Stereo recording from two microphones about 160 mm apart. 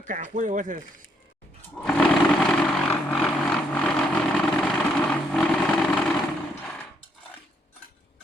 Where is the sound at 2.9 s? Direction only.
5° left (ahead or behind).